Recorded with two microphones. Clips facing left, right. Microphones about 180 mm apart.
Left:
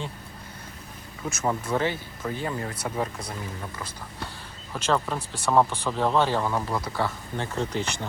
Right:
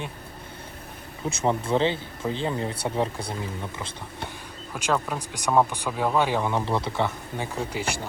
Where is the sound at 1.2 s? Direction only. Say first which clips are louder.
Right 3 dB; 25° right (ahead or behind).